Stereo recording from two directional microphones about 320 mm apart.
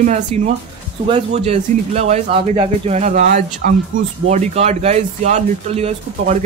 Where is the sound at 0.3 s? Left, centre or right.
Centre.